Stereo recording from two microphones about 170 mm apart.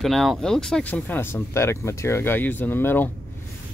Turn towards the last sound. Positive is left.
turn(degrees=10)  # may be behind; listen again after turning